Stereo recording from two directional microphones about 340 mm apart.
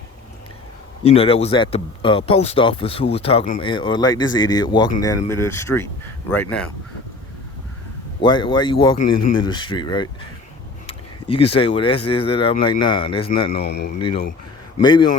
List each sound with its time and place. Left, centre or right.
1.0 s speech: centre
8.2 s speech: centre
11.3 s speech: centre
13.5 s a man's voice: left
14.8 s speech: centre